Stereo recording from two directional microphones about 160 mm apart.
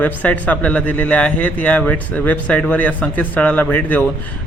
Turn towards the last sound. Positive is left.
turn(degrees=10)  # may be behind; listen again after turning